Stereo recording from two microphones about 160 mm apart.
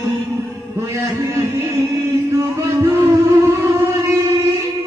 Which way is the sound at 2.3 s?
20° right (ahead or behind).